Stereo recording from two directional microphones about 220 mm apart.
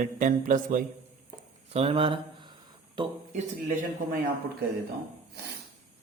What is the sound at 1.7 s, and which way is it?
Speech, 25° right (ahead or behind).